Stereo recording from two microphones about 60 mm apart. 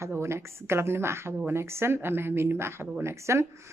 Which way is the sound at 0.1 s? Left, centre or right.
Right.